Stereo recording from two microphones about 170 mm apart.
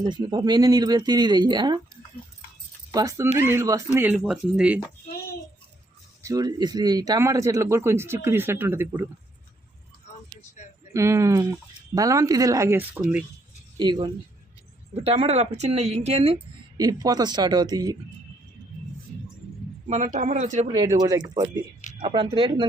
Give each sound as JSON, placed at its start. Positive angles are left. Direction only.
{"t": 0.0, "sound": "speech", "side_deg": -25}
{"t": 2.9, "sound": "speech", "side_deg": -20}
{"t": 6.2, "sound": "speech", "side_deg": -20}
{"t": 10.9, "sound": "speech", "side_deg": -15}
{"t": 13.7, "sound": "speech", "side_deg": -25}
{"t": 16.7, "sound": "speech", "side_deg": -20}
{"t": 19.9, "sound": "speech", "side_deg": -45}
{"t": 20.7, "sound": "speech", "side_deg": -25}